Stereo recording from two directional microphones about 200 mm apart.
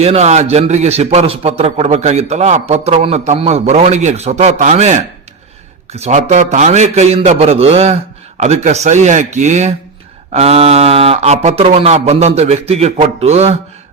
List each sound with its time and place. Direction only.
0.0 s a man's voice: 35° right (ahead or behind)